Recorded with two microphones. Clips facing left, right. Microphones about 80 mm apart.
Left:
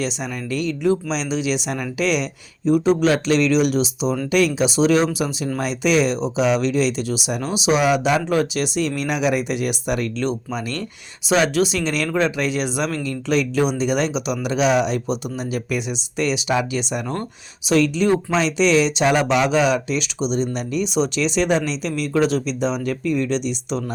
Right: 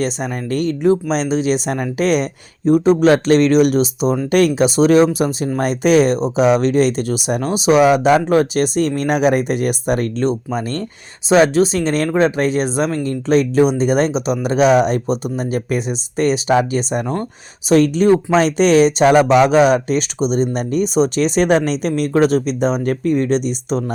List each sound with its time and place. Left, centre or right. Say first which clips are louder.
0.0 s speech: right 5 dB; right